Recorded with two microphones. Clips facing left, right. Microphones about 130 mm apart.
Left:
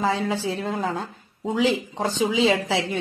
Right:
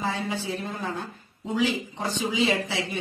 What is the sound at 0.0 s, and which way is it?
A woman's voice, 90° left.